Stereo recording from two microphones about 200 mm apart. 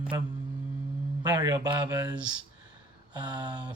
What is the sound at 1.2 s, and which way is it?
Speech, 20° right (ahead or behind).